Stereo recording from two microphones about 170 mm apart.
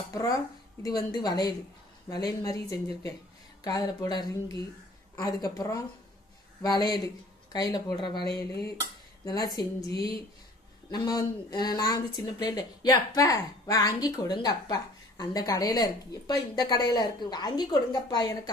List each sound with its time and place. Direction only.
0.1 s speech: 20° left (ahead or behind)
9.2 s speech: 20° left (ahead or behind)
10.8 s speech: 25° left (ahead or behind)